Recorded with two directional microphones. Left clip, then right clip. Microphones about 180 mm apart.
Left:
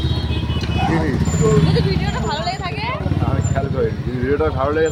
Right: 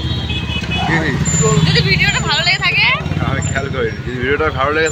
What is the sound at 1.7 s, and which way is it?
Speech, 25° left (ahead or behind).